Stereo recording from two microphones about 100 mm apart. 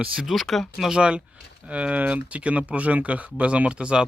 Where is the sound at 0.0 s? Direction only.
Centre (ahead or behind).